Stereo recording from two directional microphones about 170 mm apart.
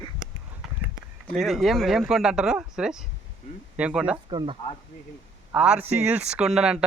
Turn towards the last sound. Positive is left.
turn(degrees=-5)  # may be behind; listen again after turning